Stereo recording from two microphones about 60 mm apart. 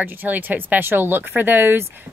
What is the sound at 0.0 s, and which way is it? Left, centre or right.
Speech, right.